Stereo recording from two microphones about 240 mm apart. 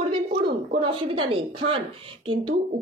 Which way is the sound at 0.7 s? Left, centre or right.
Right.